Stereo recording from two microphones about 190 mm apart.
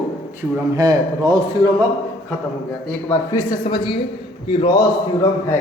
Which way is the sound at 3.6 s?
25° left (ahead or behind).